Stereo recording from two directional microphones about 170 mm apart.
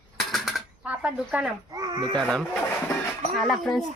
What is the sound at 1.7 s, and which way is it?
Speech, 25° right (ahead or behind).